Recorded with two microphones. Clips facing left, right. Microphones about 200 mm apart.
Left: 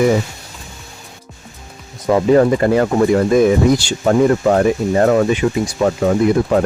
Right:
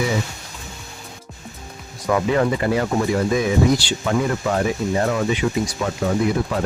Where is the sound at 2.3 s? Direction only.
40° left (ahead or behind).